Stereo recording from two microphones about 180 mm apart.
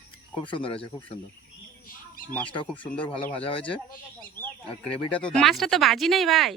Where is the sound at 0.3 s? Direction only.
30° left (ahead or behind).